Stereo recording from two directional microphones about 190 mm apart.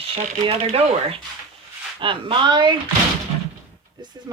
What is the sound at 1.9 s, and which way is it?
Speech, 25° right (ahead or behind).